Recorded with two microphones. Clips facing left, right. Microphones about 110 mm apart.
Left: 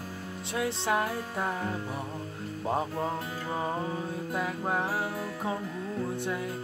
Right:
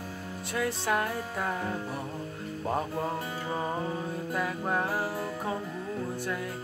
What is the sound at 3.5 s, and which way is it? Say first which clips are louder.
Music: left 1 dB; 5° left (ahead or behind).